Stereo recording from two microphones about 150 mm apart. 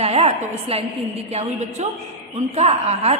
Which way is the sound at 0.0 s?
40° right (ahead or behind).